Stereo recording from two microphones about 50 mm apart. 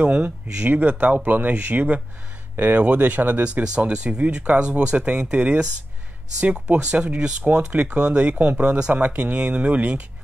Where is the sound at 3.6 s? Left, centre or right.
Right.